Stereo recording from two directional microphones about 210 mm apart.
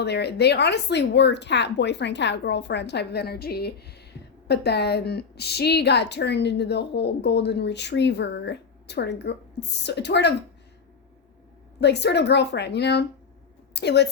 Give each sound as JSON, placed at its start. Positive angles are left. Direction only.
{"t": 0.0, "sound": "a woman's voice", "side_deg": 50}
{"t": 11.8, "sound": "a woman's voice", "side_deg": 55}